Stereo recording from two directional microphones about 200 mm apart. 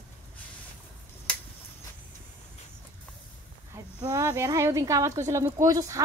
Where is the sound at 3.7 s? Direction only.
20° right (ahead or behind).